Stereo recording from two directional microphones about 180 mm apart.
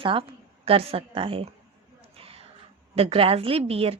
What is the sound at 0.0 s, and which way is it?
A woman's voice, 30° right (ahead or behind).